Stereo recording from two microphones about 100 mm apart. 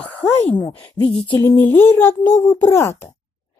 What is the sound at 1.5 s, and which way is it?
A child's voice, 20° left (ahead or behind).